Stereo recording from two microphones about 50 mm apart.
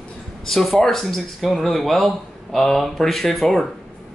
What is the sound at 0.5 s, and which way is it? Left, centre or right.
Speech, centre.